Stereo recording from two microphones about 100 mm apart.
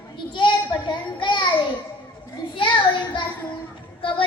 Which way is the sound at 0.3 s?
50° left (ahead or behind).